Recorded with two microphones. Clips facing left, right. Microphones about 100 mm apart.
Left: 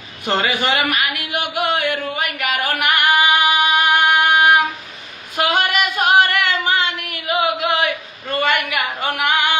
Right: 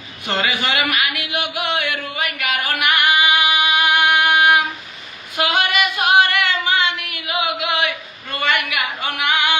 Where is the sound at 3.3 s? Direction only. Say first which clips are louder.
Left 2 dB; 40° left (ahead or behind).